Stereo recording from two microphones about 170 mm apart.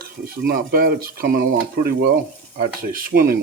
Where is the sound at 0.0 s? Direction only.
60° right (ahead or behind).